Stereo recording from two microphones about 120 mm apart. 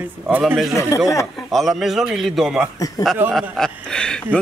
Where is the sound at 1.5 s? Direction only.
Centre (ahead or behind).